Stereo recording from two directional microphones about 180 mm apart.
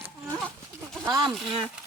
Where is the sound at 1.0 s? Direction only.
20° right (ahead or behind).